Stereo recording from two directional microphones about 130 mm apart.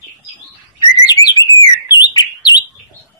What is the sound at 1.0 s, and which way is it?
Bird, 30° left (ahead or behind).